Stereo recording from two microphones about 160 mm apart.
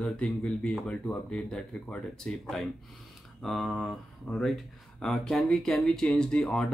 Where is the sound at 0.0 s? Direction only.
5° left (ahead or behind).